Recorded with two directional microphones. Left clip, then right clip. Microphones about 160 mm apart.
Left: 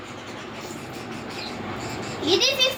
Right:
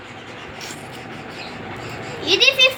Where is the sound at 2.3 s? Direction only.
20° left (ahead or behind).